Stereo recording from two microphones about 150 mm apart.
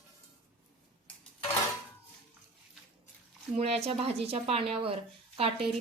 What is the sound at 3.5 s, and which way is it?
Speech, 45° right (ahead or behind).